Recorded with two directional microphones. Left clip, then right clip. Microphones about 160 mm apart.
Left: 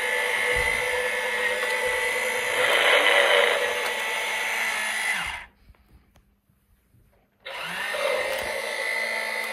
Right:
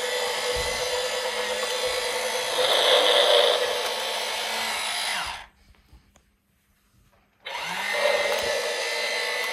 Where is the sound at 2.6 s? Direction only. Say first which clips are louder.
Even; 20° right (ahead or behind).